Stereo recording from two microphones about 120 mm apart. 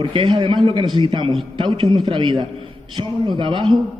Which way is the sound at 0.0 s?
40° right (ahead or behind).